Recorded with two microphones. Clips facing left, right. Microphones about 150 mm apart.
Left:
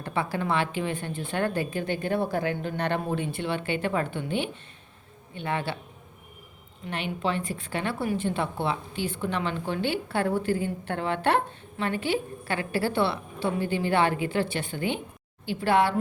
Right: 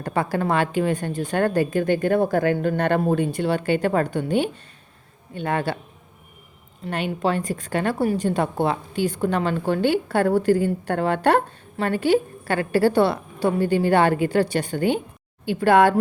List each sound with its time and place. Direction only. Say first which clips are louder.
0.0 s a woman's voice: right 6 dB; 45° right (ahead or behind)
6.8 s a woman's voice: right 6 dB; 45° right (ahead or behind)